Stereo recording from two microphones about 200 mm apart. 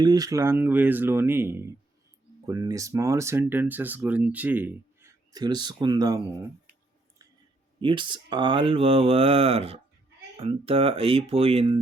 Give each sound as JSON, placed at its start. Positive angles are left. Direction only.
{"t": 0.0, "sound": "speech", "side_deg": -20}
{"t": 7.8, "sound": "speech", "side_deg": -25}